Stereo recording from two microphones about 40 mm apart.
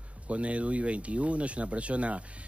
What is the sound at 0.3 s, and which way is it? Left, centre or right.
A man's voice, right.